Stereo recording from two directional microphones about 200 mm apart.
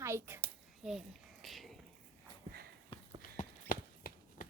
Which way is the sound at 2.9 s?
25° left (ahead or behind).